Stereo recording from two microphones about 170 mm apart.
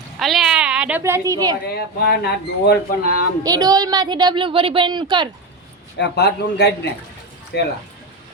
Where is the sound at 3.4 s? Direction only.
20° right (ahead or behind).